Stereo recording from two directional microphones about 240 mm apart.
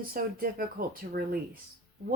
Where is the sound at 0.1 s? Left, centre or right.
Right.